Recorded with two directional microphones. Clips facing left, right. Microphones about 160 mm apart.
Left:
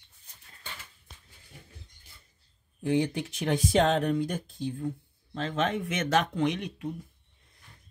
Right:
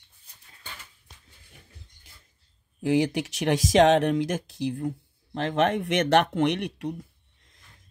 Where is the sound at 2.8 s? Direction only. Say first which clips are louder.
Right 4 dB; 85° right.